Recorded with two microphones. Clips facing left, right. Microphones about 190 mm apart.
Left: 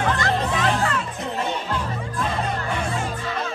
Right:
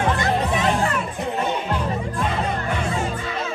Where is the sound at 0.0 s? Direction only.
20° right (ahead or behind).